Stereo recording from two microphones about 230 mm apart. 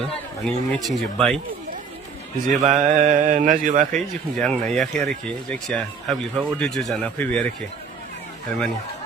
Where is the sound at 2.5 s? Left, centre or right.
Right.